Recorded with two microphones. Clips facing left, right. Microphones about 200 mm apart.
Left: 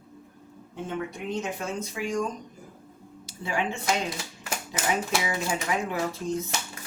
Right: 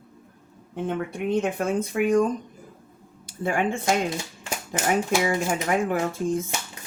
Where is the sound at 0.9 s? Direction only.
55° right (ahead or behind).